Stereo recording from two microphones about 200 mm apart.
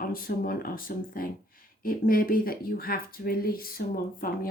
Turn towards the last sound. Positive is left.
turn(degrees=45)  # may be behind; listen again after turning